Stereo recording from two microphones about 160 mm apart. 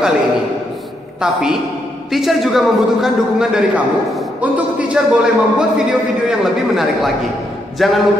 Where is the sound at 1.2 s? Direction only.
5° right (ahead or behind).